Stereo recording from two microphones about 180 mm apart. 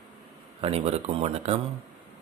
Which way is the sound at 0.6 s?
35° right (ahead or behind).